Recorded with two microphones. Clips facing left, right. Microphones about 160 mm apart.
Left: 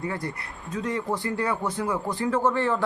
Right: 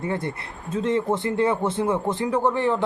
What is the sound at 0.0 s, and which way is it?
A man's voice, 25° right (ahead or behind).